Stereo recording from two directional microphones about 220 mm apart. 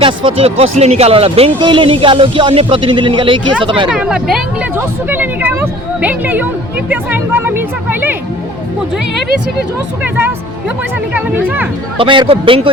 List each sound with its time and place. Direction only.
0.0 s speech: 25° right (ahead or behind)
3.8 s speech: 5° right (ahead or behind)
10.0 s speech: 10° right (ahead or behind)
11.9 s speech: 20° right (ahead or behind)